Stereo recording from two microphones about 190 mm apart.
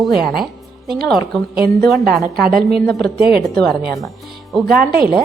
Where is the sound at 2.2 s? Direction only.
50° right (ahead or behind).